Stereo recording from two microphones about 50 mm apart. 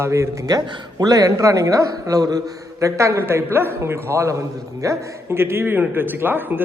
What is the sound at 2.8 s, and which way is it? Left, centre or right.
A man's voice, right.